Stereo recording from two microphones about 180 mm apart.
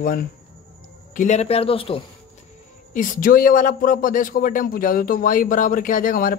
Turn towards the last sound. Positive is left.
turn(degrees=50)  # may be behind; listen again after turning